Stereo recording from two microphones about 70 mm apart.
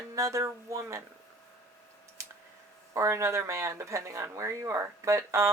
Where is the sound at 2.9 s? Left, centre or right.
Right.